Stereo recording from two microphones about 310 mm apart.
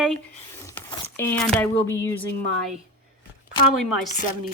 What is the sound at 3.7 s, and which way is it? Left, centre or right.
Speech, centre.